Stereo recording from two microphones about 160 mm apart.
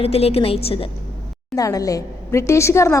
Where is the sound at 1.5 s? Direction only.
20° left (ahead or behind).